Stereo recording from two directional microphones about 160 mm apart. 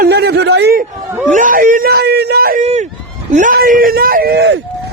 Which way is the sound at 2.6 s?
45° right (ahead or behind).